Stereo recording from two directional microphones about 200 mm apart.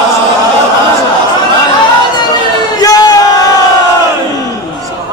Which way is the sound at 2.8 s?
20° left (ahead or behind).